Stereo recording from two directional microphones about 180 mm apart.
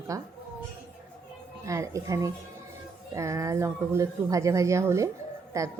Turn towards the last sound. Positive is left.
turn(degrees=-15)  # may be behind; listen again after turning